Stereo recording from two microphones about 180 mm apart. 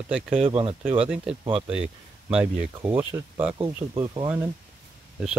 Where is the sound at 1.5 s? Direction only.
5° right (ahead or behind).